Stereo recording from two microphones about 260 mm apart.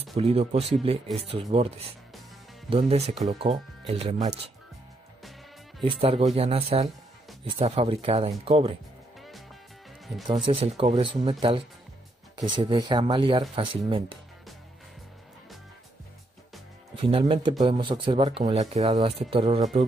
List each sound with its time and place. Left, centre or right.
0.1 s speech: right
2.7 s speech: right
5.9 s speech: right
10.3 s speech: centre
16.9 s speech: centre